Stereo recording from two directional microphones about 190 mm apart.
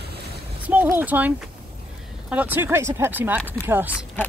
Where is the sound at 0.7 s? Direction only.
10° right (ahead or behind).